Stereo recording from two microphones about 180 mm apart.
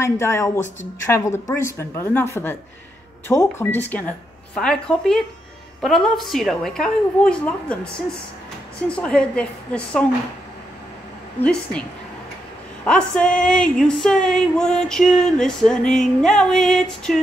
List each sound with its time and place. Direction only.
0.0 s a woman's voice: 15° left (ahead or behind)
12.8 s a woman's voice: 5° left (ahead or behind)